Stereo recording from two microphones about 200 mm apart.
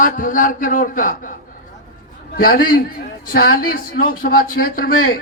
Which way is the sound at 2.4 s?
45° left (ahead or behind).